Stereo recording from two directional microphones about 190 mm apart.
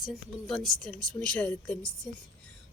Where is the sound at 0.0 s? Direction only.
Centre (ahead or behind).